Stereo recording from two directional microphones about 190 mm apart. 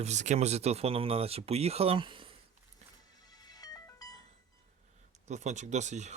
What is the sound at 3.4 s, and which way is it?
Music, 20° left (ahead or behind).